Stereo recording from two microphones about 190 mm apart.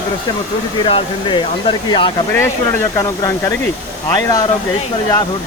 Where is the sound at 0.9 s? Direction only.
25° left (ahead or behind).